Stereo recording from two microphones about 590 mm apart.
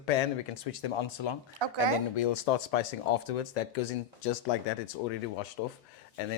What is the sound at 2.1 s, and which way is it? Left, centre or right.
Speech, left.